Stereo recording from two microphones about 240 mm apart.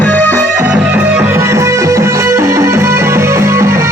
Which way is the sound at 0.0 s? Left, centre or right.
Centre.